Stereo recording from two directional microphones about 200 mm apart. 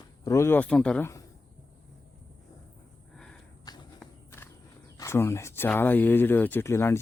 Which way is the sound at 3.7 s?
20° left (ahead or behind).